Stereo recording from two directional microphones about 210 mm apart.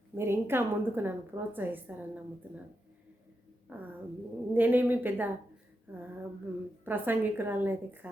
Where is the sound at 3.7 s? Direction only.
10° right (ahead or behind).